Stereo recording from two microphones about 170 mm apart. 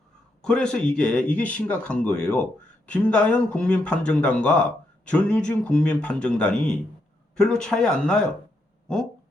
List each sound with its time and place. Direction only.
0.4 s speech: 5° left (ahead or behind)